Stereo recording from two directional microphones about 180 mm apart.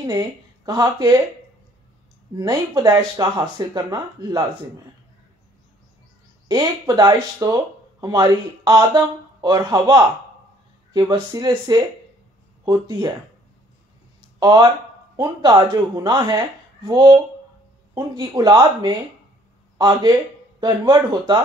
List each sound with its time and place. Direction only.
0.0 s speech: 20° right (ahead or behind)
2.3 s speech: 20° right (ahead or behind)
6.5 s speech: 20° right (ahead or behind)
14.4 s speech: 20° right (ahead or behind)